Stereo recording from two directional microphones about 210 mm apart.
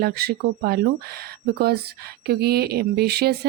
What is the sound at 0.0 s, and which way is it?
Speech, 50° right (ahead or behind).